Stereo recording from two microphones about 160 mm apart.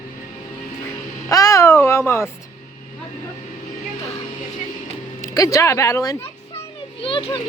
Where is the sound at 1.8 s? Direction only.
15° left (ahead or behind).